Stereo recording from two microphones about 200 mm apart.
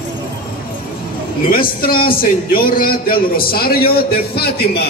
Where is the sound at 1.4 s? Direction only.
45° left (ahead or behind).